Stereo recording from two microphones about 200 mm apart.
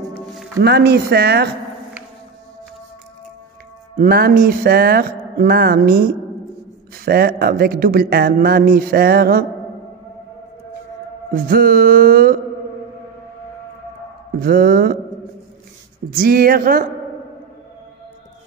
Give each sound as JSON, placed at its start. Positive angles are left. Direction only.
{"t": 0.6, "sound": "speech", "side_deg": -55}
{"t": 3.9, "sound": "speech", "side_deg": -45}
{"t": 11.3, "sound": "speech", "side_deg": -45}
{"t": 14.4, "sound": "speech", "side_deg": -45}
{"t": 16.1, "sound": "speech", "side_deg": -45}